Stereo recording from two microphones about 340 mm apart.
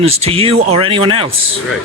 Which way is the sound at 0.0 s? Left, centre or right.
Centre.